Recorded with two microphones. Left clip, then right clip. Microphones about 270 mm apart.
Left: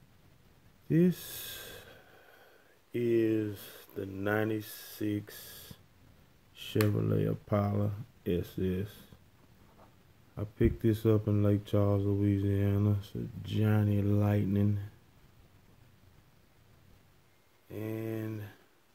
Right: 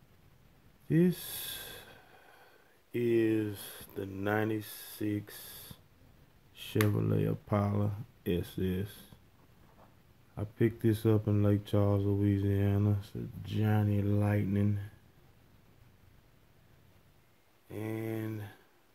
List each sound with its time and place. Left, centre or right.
0.8 s speech: centre
10.3 s speech: centre
17.6 s speech: centre